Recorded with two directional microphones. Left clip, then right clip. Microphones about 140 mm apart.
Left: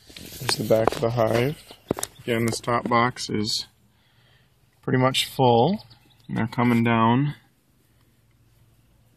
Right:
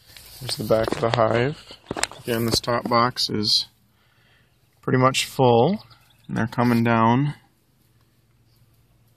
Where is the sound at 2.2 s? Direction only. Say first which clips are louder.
Even; 5° left (ahead or behind).